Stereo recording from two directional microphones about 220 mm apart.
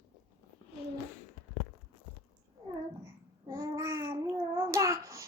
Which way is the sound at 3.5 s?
15° right (ahead or behind).